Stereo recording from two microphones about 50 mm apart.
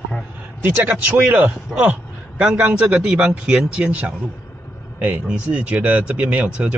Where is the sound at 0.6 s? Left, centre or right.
Right.